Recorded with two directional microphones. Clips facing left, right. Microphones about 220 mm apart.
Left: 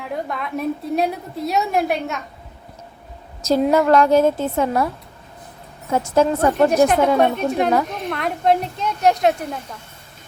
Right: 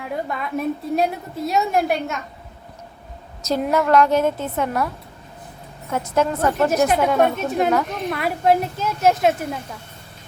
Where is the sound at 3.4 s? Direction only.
30° left (ahead or behind).